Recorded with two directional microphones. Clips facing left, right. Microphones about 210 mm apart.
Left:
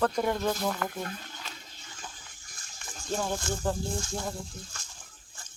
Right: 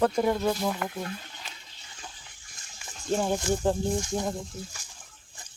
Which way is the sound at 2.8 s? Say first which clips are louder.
Right 5 dB; 15° right (ahead or behind).